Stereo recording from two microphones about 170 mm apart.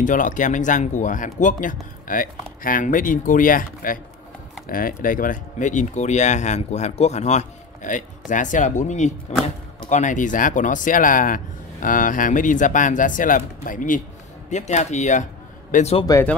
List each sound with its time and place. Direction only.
0.0 s a man's voice: 50° left (ahead or behind)